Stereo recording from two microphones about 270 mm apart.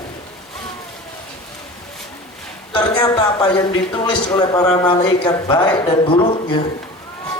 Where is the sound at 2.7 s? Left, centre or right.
Centre.